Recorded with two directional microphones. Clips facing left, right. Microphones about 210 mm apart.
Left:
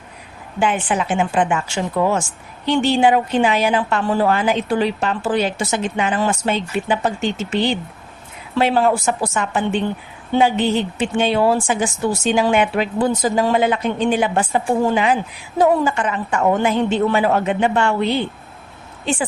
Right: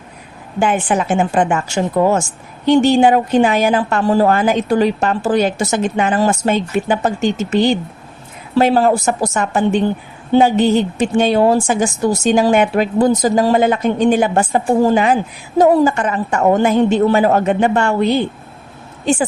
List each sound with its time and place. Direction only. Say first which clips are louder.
0.6 s a woman's voice: right 3 dB; 45° right (ahead or behind)